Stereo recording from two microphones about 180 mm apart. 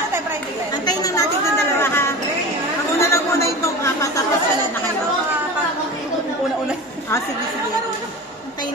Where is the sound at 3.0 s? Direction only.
15° left (ahead or behind).